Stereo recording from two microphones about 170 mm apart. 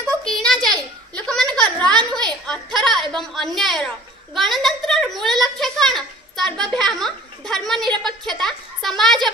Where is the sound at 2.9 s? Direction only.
Centre (ahead or behind).